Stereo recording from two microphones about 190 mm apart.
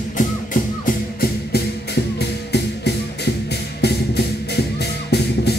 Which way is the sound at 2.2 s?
60° left (ahead or behind).